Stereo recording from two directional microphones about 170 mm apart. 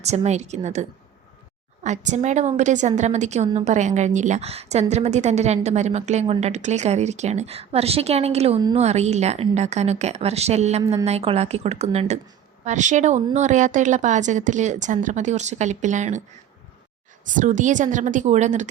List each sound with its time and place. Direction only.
0.0 s a woman's voice: 40° right (ahead or behind)
17.3 s a woman's voice: 45° right (ahead or behind)